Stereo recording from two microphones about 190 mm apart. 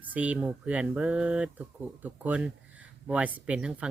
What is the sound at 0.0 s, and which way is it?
Speech, 10° right (ahead or behind).